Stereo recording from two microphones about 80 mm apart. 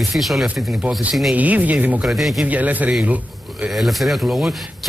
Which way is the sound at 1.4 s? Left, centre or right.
Centre.